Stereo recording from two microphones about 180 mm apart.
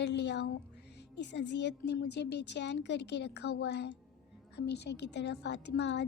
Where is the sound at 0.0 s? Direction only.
70° left (ahead or behind).